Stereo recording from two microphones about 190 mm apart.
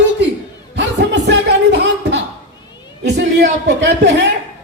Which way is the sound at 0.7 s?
65° right (ahead or behind).